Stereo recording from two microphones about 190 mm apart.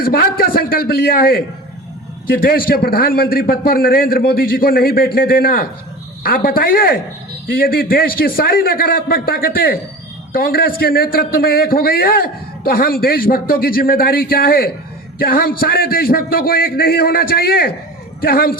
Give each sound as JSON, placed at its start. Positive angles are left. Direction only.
{"t": 0.0, "sound": "a man's voice", "side_deg": 50}